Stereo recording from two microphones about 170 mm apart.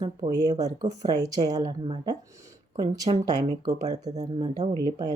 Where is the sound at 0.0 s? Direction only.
25° right (ahead or behind).